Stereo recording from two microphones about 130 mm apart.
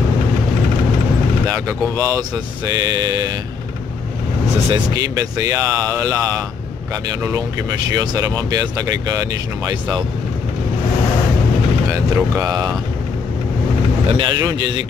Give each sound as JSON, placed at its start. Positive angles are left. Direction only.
{"t": 1.5, "sound": "speech", "side_deg": -25}
{"t": 4.6, "sound": "speech", "side_deg": -30}
{"t": 7.3, "sound": "speech", "side_deg": -30}
{"t": 12.4, "sound": "speech", "side_deg": -30}
{"t": 14.0, "sound": "speech", "side_deg": -40}